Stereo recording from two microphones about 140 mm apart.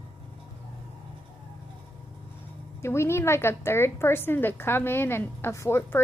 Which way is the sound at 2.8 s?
20° left (ahead or behind).